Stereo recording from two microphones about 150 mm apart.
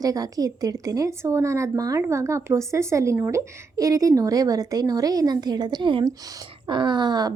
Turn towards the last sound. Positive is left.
turn(degrees=-30)  # may be behind; listen again after turning